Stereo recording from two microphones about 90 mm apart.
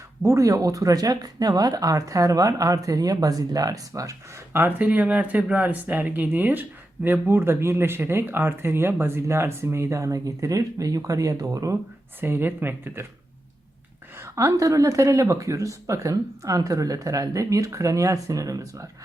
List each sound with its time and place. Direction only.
0.2 s speech: 35° right (ahead or behind)
4.5 s speech: 20° right (ahead or behind); by 11.8 s 40° right (ahead or behind)
12.2 s speech: 25° right (ahead or behind)
14.2 s speech: 35° right (ahead or behind)